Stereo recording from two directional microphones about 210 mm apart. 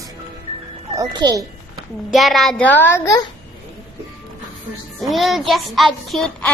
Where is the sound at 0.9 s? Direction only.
20° right (ahead or behind).